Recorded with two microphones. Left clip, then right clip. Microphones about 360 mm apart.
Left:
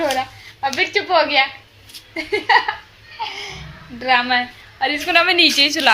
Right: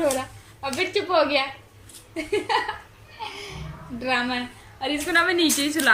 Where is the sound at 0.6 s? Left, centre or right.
Centre.